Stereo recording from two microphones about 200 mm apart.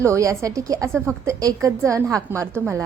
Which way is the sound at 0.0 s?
15° right (ahead or behind).